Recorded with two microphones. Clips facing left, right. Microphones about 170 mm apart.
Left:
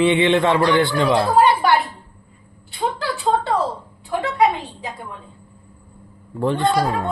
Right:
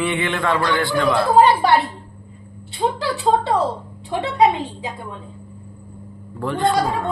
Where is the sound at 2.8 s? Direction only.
20° right (ahead or behind).